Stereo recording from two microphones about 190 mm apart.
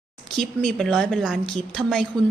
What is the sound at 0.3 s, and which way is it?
Speech, centre (ahead or behind).